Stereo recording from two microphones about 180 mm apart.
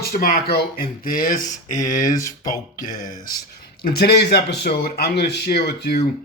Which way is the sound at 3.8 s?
60° left (ahead or behind).